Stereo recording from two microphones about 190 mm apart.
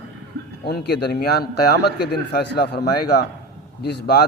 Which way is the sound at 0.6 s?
60° left (ahead or behind).